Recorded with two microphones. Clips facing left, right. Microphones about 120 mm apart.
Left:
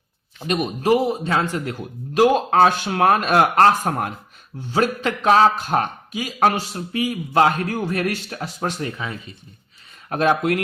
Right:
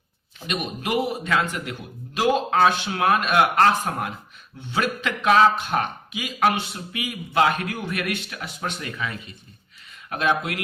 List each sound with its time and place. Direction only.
0.3 s a man's voice: 40° left (ahead or behind)
10.1 s a man's voice: 40° left (ahead or behind)